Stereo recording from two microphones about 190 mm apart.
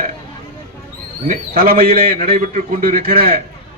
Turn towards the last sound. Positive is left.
turn(degrees=-50)  # may be behind; listen again after turning